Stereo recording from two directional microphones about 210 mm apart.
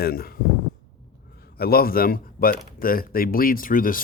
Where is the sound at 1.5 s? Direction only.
45° left (ahead or behind).